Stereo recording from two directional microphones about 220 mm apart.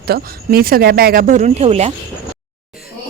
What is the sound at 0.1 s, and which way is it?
Speech, 45° right (ahead or behind).